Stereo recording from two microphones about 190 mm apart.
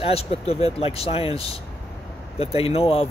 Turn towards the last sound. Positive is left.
turn(degrees=30)  # may be behind; listen again after turning